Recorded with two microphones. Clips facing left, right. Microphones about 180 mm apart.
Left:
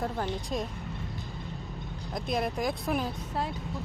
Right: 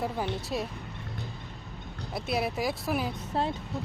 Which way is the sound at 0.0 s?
5° right (ahead or behind).